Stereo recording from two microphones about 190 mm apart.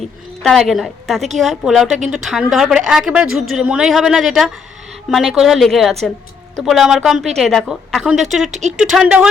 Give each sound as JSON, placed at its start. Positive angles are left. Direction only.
{"t": 0.4, "sound": "a woman's voice", "side_deg": 0}
{"t": 8.5, "sound": "speech", "side_deg": -40}
{"t": 8.8, "sound": "a woman's voice", "side_deg": -5}